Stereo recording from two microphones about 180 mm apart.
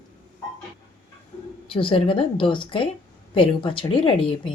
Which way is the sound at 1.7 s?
30° left (ahead or behind).